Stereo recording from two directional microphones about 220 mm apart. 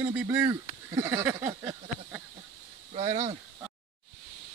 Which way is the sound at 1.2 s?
10° right (ahead or behind).